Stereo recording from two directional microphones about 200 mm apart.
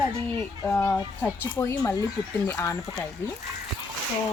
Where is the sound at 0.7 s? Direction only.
10° left (ahead or behind).